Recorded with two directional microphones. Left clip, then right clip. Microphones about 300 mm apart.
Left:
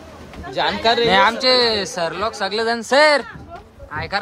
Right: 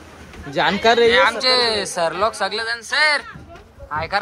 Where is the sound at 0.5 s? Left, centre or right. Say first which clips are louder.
Right 2 dB; centre.